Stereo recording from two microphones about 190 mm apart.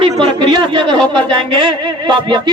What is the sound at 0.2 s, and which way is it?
Speech, 25° right (ahead or behind).